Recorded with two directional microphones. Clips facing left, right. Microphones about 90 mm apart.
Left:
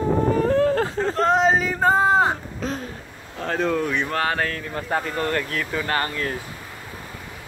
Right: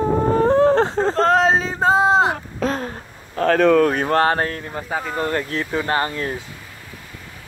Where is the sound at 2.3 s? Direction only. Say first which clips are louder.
Right 4 dB; 70° right (ahead or behind).